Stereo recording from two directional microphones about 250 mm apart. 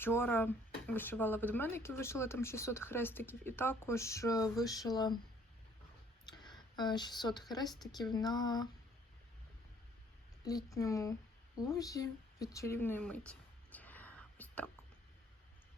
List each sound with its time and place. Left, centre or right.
0.0 s speech: centre
6.2 s speech: centre
10.4 s speech: centre
11.6 s a sound: centre